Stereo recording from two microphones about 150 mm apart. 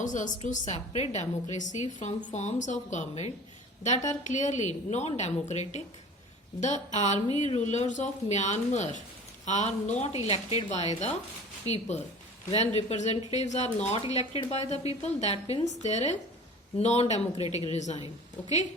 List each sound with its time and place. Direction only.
0.0 s a woman's voice: 55° left (ahead or behind)